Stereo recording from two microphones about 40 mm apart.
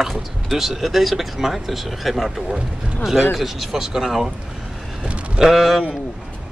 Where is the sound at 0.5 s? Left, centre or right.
Centre.